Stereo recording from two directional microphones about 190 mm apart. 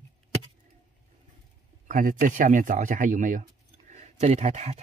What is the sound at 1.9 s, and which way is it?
Speech, 45° right (ahead or behind).